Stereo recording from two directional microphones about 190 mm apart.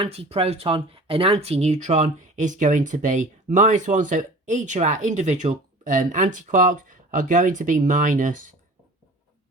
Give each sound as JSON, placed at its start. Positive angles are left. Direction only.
{"t": 0.0, "sound": "speech", "side_deg": -30}